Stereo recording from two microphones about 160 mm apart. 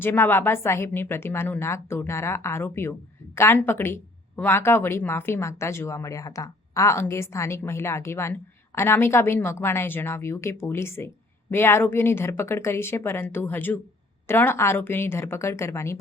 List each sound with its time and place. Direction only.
0.0 s speech: 15° left (ahead or behind)